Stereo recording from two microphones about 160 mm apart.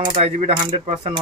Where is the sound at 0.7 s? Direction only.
45° right (ahead or behind).